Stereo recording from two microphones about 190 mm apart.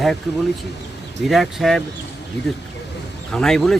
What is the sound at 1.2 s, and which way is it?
Speech, centre (ahead or behind).